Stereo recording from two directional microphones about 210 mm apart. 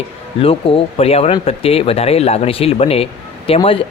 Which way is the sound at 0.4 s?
25° left (ahead or behind).